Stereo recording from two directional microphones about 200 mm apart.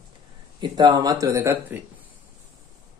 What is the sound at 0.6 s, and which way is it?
Speech, 20° right (ahead or behind).